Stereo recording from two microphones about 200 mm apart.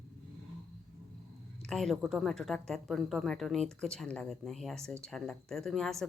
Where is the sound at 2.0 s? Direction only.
Centre (ahead or behind).